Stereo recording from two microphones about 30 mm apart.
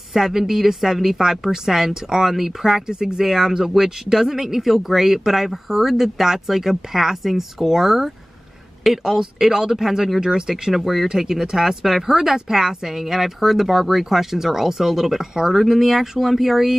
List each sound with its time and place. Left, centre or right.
0.1 s speech: centre
2.9 s speech: right
3.3 s speech: centre
10.7 s speech: centre
11.1 s speech: centre